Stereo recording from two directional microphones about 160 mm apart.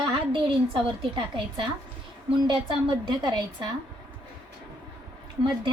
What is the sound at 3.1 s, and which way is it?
Speech, 25° right (ahead or behind).